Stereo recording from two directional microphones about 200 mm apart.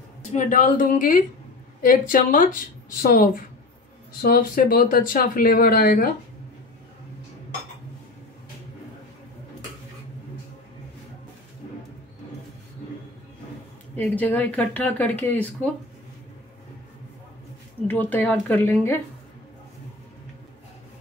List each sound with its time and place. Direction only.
0.3 s a woman's voice: 40° left (ahead or behind)
13.9 s speech: 10° left (ahead or behind)
17.8 s speech: 10° left (ahead or behind)